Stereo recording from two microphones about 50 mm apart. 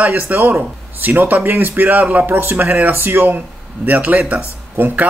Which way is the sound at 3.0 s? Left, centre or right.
Right.